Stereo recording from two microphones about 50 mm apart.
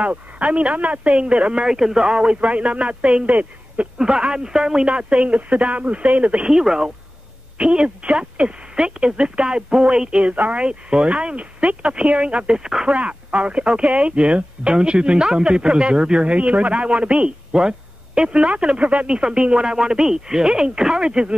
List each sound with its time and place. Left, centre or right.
0.0 s speech: right
4.0 s speech: centre
4.8 s speech: right
6.5 s speech: centre
12.9 s speech: right